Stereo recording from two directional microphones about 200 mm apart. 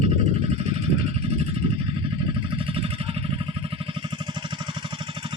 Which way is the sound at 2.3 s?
25° right (ahead or behind).